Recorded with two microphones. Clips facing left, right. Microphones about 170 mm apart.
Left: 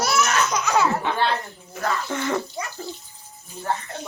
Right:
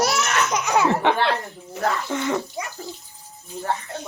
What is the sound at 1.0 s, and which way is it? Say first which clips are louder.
Speech: right 3 dB; 70° right (ahead or behind).